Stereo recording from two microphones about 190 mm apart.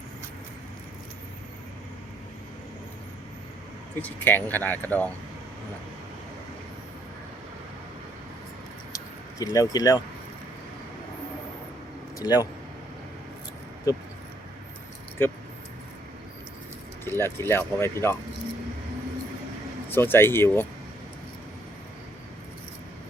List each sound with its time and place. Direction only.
4.0 s speech: 10° left (ahead or behind)
9.4 s speech: 20° left (ahead or behind)
12.2 s speech: 20° left (ahead or behind)
13.9 s speech: 20° left (ahead or behind)
15.2 s speech: 10° left (ahead or behind)
17.1 s speech: 10° left (ahead or behind)
19.9 s speech: 10° left (ahead or behind)